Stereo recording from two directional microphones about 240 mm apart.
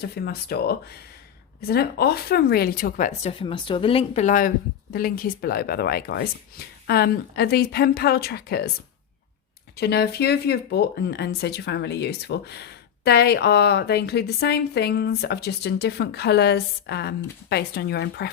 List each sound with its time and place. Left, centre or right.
0.0 s speech: left
9.7 s speech: left